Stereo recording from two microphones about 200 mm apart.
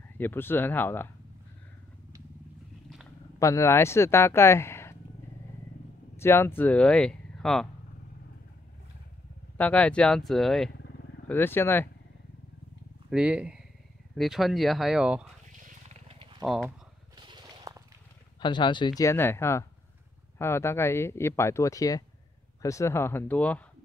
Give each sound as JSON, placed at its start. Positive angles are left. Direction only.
{"t": 0.2, "sound": "speech", "side_deg": 10}
{"t": 3.3, "sound": "speech", "side_deg": 15}
{"t": 6.1, "sound": "speech", "side_deg": 10}
{"t": 9.6, "sound": "speech", "side_deg": 5}
{"t": 13.1, "sound": "speech", "side_deg": -5}
{"t": 15.9, "sound": "wild animals", "side_deg": -25}
{"t": 17.2, "sound": "a sound", "side_deg": -25}
{"t": 18.4, "sound": "speech", "side_deg": 25}